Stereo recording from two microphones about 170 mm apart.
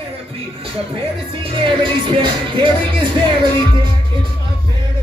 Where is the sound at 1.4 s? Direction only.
30° right (ahead or behind).